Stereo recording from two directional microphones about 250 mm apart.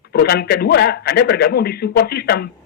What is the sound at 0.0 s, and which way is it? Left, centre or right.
A man's voice, left.